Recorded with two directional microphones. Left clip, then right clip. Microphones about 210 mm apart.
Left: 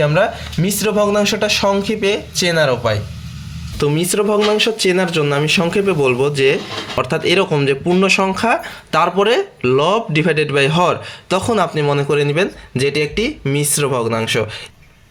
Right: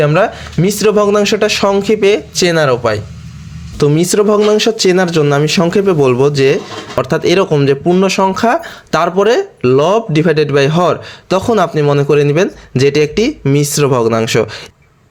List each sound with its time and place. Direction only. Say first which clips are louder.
0.0 s speech: right 4 dB; 45° right (ahead or behind)
3.8 s speech: right 6 dB; 35° right (ahead or behind)